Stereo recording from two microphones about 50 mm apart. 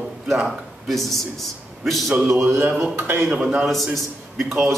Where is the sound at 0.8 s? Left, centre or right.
Centre.